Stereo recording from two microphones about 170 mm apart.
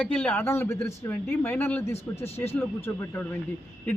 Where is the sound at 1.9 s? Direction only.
35° left (ahead or behind).